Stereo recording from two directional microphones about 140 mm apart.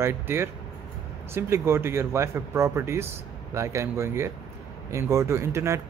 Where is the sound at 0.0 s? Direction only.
20° right (ahead or behind).